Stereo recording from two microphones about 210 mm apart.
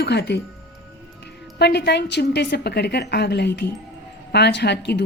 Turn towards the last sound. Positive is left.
turn(degrees=55)  # may be behind; listen again after turning